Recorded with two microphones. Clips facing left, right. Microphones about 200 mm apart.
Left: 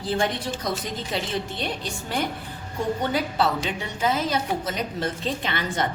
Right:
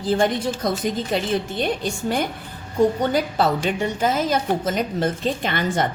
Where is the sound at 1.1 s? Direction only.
50° right (ahead or behind).